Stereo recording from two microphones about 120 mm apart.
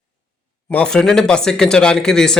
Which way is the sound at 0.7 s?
10° left (ahead or behind).